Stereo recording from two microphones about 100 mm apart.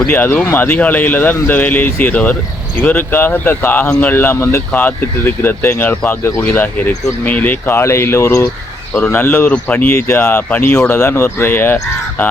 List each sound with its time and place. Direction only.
0.1 s speech: 20° left (ahead or behind)